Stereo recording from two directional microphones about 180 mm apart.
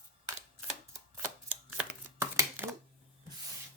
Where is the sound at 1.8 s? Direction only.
10° right (ahead or behind).